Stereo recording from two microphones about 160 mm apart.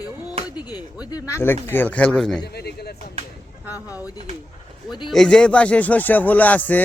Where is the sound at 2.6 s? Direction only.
80° left.